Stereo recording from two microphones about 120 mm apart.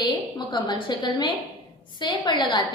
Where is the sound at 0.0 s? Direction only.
40° left (ahead or behind).